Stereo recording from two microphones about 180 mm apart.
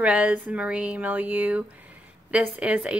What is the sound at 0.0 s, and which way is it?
Speech, 5° right (ahead or behind).